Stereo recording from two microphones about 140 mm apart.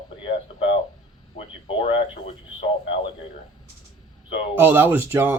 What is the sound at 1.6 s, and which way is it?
Radio, 40° left (ahead or behind).